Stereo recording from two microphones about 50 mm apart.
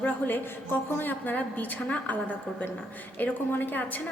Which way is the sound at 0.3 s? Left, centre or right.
Left.